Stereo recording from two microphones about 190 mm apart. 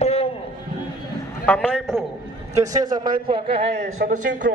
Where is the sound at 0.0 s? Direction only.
35° left (ahead or behind).